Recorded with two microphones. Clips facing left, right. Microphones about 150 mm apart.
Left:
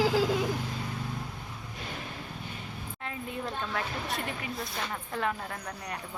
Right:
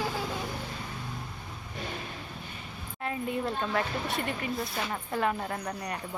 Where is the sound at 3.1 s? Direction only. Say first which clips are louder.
Right 5 dB; centre (ahead or behind).